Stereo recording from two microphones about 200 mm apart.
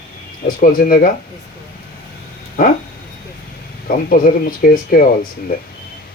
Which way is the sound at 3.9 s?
45° left (ahead or behind).